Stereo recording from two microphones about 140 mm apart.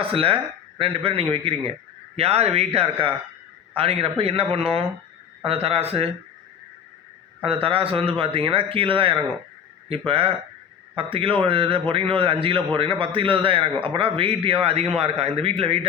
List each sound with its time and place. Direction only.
0.0 s a man's voice: 40° right (ahead or behind)
7.4 s a man's voice: 40° right (ahead or behind)